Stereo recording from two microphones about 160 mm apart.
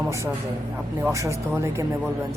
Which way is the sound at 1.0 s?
20° right (ahead or behind).